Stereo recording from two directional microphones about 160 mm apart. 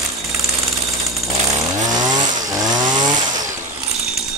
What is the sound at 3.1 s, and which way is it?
Chainsaw, 50° right (ahead or behind).